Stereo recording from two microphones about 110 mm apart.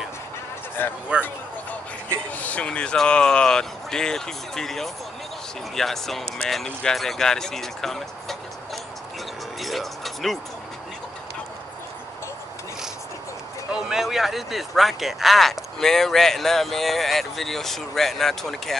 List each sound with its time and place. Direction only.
0.8 s speech: 20° left (ahead or behind)
2.3 s speech: 15° left (ahead or behind)
9.6 s a sound: centre (ahead or behind)
13.7 s speech: 5° right (ahead or behind)